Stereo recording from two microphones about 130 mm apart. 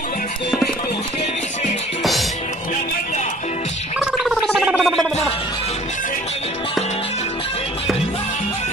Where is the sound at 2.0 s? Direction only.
Centre (ahead or behind).